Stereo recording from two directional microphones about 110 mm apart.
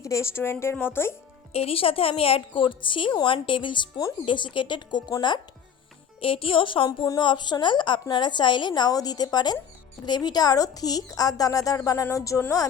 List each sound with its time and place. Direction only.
0.0 s speech: 25° left (ahead or behind)
1.5 s a woman's voice: 60° left (ahead or behind); by 5.1 s 45° left (ahead or behind)
6.1 s a woman's voice: 55° left (ahead or behind); by 12.6 s 30° left (ahead or behind)